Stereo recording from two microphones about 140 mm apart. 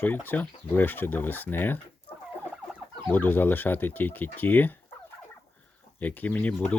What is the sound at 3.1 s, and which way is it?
Speech, 15° left (ahead or behind).